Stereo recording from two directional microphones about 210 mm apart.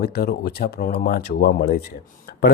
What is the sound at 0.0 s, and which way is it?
Speech, 45° left (ahead or behind).